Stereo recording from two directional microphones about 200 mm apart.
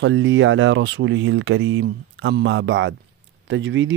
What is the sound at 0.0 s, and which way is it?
Speech, 70° right (ahead or behind).